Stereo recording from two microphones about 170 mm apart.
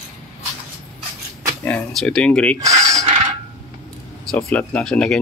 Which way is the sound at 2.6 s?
20° right (ahead or behind).